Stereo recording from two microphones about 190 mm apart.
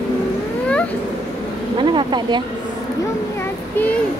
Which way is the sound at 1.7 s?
25° right (ahead or behind).